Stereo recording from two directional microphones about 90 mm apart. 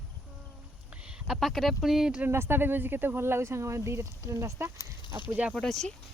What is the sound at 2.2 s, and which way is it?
Speech, 25° right (ahead or behind).